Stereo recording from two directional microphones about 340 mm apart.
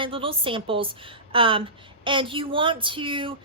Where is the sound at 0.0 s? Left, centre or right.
Centre.